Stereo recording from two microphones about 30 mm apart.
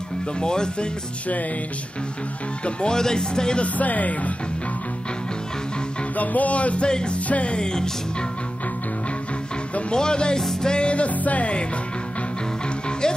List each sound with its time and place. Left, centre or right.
0.4 s speech: left
2.6 s music: left
3.0 s speech: left
3.6 s speech: left
6.1 s music: left
6.9 s speech: left
7.2 s music: left
7.5 s speech: left
9.9 s speech: left
10.7 s music: left
11.1 s speech: left